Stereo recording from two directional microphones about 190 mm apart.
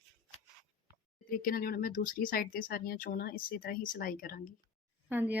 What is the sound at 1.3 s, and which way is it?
Speech, 50° left (ahead or behind).